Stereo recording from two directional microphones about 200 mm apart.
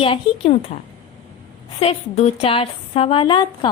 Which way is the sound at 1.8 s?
30° left (ahead or behind).